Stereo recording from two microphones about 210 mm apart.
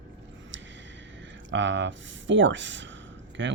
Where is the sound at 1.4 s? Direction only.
60° right (ahead or behind).